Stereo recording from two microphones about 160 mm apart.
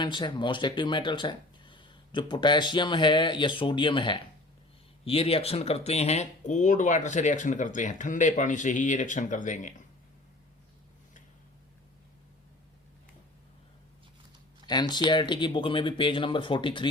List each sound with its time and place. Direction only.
0.0 s speech: 30° left (ahead or behind); by 9.8 s 50° left (ahead or behind)
14.7 s speech: 25° left (ahead or behind)